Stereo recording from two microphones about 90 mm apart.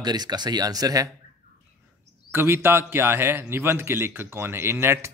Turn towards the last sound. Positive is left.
turn(degrees=-30)  # may be behind; listen again after turning